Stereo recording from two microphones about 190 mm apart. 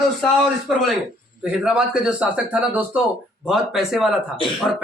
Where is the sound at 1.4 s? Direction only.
5° right (ahead or behind).